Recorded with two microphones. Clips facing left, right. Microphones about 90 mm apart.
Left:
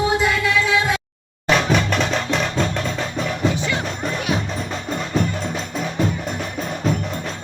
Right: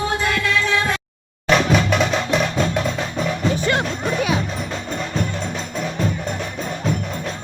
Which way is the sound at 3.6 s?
60° right (ahead or behind).